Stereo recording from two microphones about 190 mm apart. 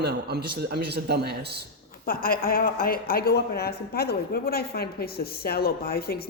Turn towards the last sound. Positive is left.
turn(degrees=55)  # may be behind; listen again after turning